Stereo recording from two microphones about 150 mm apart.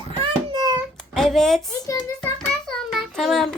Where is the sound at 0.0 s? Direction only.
30° right (ahead or behind).